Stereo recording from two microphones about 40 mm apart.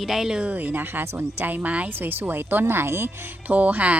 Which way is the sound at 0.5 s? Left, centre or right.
Right.